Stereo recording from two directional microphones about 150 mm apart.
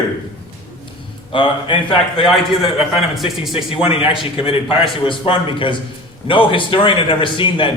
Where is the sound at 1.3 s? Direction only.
35° left (ahead or behind).